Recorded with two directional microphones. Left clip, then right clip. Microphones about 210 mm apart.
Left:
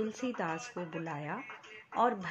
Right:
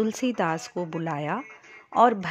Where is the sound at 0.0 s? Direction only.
55° right (ahead or behind).